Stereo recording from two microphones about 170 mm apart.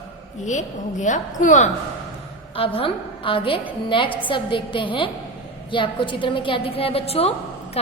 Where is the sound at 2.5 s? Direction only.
35° left (ahead or behind).